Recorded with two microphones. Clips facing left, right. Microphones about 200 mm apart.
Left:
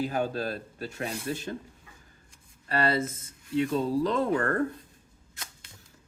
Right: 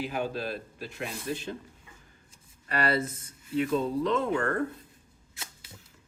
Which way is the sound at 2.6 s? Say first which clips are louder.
Left 1 dB; 25° left (ahead or behind).